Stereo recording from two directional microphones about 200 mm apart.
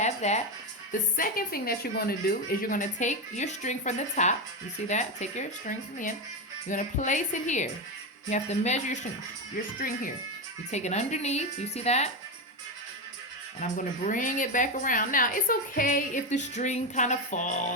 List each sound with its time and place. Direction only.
0.0 s music: 35° left (ahead or behind)
1.1 s a woman's voice: 45° left (ahead or behind)
10.7 s a woman's voice: 35° left (ahead or behind)
13.6 s a woman's voice: 40° left (ahead or behind)